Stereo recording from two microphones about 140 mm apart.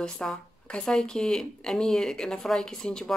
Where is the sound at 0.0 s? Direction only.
5° left (ahead or behind).